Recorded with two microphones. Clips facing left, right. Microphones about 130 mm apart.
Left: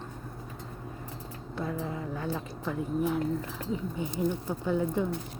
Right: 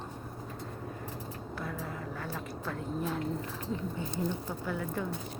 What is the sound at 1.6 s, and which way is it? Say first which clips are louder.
A woman's voice: left 6 dB; 20° left (ahead or behind).